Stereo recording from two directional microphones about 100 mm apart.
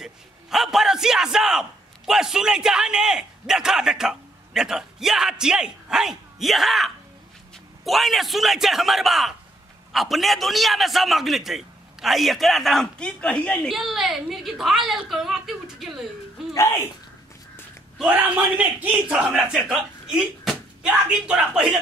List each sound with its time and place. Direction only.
0.0 s a man's voice: 5° right (ahead or behind)
13.7 s a man's voice: centre (ahead or behind)
16.4 s a sound: 5° right (ahead or behind)
18.1 s speech: 15° right (ahead or behind)